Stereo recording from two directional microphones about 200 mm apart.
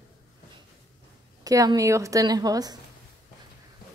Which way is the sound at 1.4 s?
15° right (ahead or behind).